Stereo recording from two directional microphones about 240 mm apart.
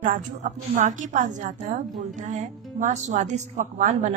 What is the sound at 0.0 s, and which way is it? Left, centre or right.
A woman's voice, right.